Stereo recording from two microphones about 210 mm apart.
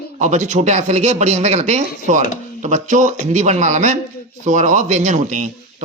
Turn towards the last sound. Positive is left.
turn(degrees=-35)  # may be behind; listen again after turning